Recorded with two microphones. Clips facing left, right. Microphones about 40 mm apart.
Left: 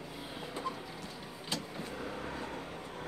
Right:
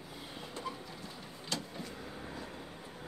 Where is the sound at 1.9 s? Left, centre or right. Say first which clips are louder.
Left 5 dB; left.